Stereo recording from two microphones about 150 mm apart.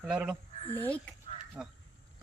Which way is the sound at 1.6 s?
5° right (ahead or behind).